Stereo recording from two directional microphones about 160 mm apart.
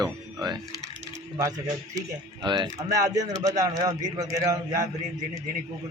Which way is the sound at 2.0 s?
30° right (ahead or behind).